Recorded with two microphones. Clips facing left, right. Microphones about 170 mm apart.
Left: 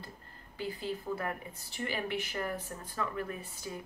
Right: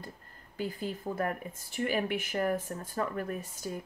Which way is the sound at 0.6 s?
45° right (ahead or behind).